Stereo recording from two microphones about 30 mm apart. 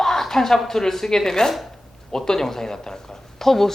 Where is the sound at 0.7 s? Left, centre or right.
Centre.